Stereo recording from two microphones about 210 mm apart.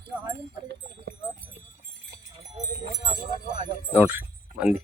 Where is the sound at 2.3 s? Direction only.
25° right (ahead or behind).